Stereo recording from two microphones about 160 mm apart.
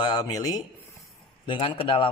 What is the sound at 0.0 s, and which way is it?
A man's voice, 25° left (ahead or behind).